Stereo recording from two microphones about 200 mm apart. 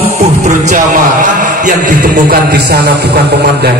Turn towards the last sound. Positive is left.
turn(degrees=-55)  # may be behind; listen again after turning